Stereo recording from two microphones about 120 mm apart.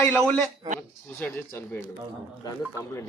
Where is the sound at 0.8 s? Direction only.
15° left (ahead or behind).